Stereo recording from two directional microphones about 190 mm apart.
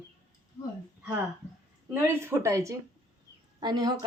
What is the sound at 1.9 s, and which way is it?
A woman's voice, 10° right (ahead or behind).